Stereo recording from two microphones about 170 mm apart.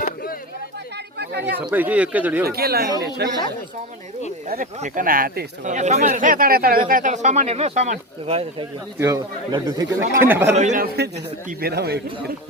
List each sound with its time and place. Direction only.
0.0 s a sound: 60° left (ahead or behind)
1.2 s speech: 75° right (ahead or behind)
1.5 s speech: 10° right (ahead or behind)
2.4 s speech: 65° right (ahead or behind)
3.2 s a man's voice: 75° right (ahead or behind)
4.4 s speech: 45° right (ahead or behind)
5.7 s speech: 45° right (ahead or behind)
9.0 s speech: 15° right (ahead or behind)
10.8 s a man's voice: 75° right (ahead or behind)